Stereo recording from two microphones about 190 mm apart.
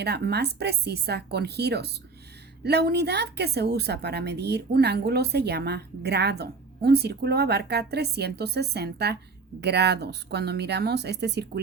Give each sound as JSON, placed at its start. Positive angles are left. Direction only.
{"t": 0.0, "sound": "a woman's voice", "side_deg": -60}